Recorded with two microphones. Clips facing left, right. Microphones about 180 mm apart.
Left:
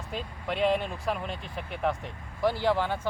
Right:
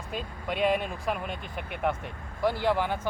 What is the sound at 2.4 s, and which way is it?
Speech, 15° right (ahead or behind).